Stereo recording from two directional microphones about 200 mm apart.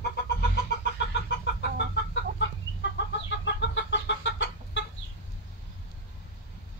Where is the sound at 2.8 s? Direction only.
65° left (ahead or behind).